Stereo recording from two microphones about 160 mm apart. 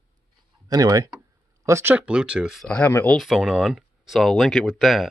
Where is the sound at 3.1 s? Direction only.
Centre (ahead or behind).